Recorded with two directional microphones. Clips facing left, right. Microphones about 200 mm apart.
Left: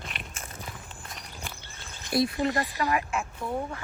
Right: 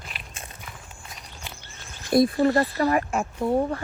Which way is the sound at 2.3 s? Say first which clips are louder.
Right 7 dB; 40° right (ahead or behind).